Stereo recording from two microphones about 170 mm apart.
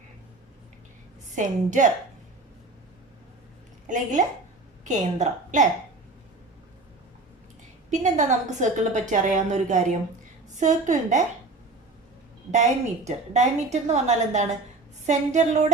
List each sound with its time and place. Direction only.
1.4 s a woman's voice: 50° right (ahead or behind)
3.8 s a woman's voice: 50° right (ahead or behind)
7.9 s a woman's voice: 45° right (ahead or behind)
12.5 s a woman's voice: 45° right (ahead or behind)